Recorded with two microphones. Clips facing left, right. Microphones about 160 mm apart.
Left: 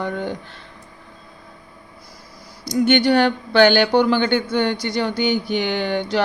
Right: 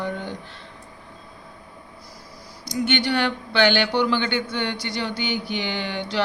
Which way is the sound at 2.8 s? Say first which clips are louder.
Left 7 dB; 45° left (ahead or behind).